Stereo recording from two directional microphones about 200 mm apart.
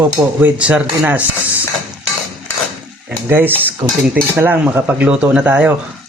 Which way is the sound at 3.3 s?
10° right (ahead or behind).